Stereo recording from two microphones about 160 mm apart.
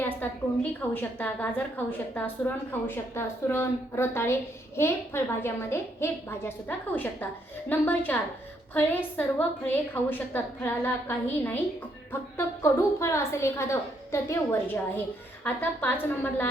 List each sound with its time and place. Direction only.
0.0 s a woman's voice: 10° left (ahead or behind)
12.1 s a woman's voice: 15° left (ahead or behind)